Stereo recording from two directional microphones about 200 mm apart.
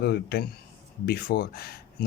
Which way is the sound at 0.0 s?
55° left (ahead or behind).